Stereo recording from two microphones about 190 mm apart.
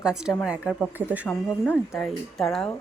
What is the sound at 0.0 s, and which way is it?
Speech, 5° right (ahead or behind).